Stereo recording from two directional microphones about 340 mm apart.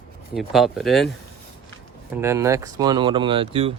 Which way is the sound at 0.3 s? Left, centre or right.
Centre.